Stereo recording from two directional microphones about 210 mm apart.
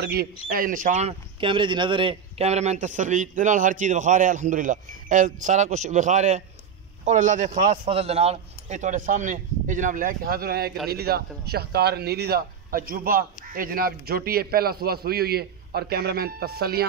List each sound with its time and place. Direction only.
0.0 s a man's voice: 45° right (ahead or behind)